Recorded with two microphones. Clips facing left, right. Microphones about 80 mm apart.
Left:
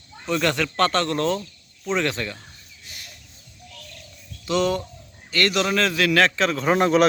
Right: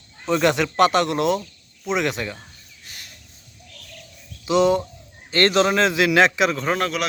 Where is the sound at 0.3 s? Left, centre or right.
Centre.